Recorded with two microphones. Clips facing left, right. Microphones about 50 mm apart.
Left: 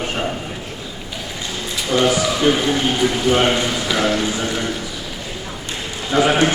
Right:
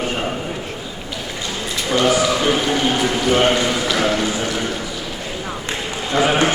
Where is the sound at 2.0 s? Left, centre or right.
Centre.